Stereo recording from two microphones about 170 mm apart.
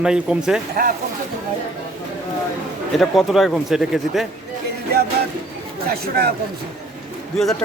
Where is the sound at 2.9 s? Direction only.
Centre (ahead or behind).